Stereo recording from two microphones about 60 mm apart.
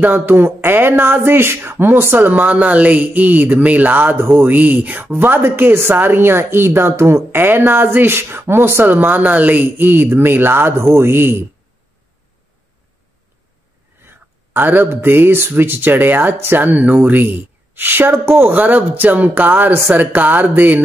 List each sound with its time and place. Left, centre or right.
0.0 s speech: right
5.1 s speech: right
14.0 s a sound: right
14.9 s speech: right